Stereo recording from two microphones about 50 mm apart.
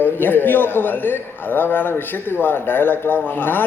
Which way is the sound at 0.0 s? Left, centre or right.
Left.